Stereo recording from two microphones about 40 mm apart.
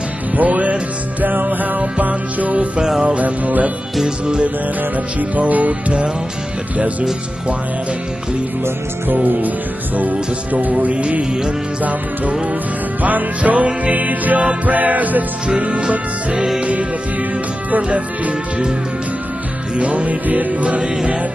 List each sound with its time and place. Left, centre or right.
0.4 s music: right
2.8 s music: centre
3.2 s music: right
4.9 s music: right
9.1 s music: right
13.0 s music: right
15.4 s music: right
17.8 s music: right
20.8 s music: centre